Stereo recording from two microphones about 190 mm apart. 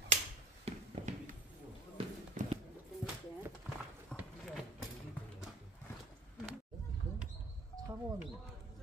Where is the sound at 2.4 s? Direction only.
40° right (ahead or behind).